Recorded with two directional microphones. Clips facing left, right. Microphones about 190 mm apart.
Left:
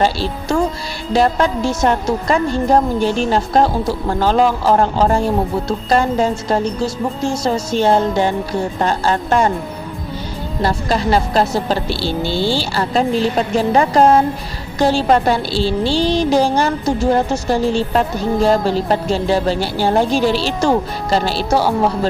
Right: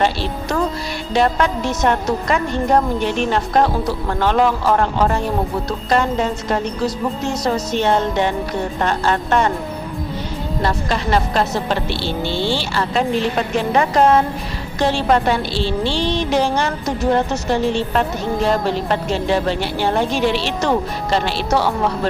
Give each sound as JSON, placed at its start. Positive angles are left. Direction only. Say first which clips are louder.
{"t": 0.0, "sound": "a woman's voice", "louder": "left 2 dB", "side_deg": 30}
{"t": 10.6, "sound": "a woman's voice", "louder": "left 4 dB", "side_deg": 35}